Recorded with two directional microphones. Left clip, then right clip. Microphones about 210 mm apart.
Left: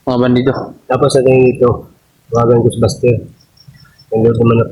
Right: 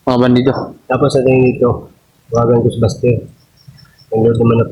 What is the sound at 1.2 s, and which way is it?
Speech, centre (ahead or behind).